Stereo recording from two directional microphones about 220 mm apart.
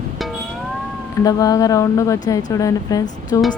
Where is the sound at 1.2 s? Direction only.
15° left (ahead or behind).